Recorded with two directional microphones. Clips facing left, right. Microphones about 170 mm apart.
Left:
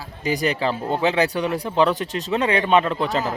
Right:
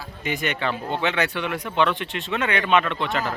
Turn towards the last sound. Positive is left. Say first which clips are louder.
# left 3 dB
turn(degrees=35)  # may be behind; listen again after turning